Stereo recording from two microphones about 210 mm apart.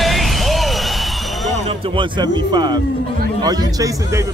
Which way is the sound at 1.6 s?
25° right (ahead or behind).